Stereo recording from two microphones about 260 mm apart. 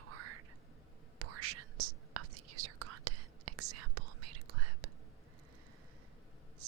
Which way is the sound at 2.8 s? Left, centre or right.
Right.